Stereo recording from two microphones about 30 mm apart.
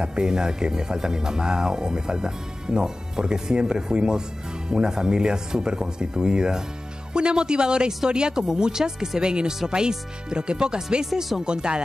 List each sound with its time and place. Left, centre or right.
0.0 s speech: right